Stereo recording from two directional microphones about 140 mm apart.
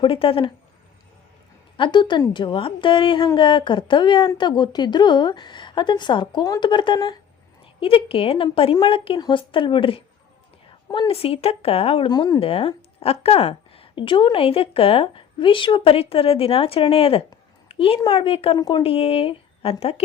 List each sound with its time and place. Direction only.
0.0 s a woman's voice: 40° left (ahead or behind)
1.7 s a woman's voice: 35° left (ahead or behind)
12.1 s speech: 30° left (ahead or behind)
12.4 s a woman's voice: 40° left (ahead or behind)
17.7 s a sound: 45° left (ahead or behind)
18.0 s a woman's voice: 35° left (ahead or behind)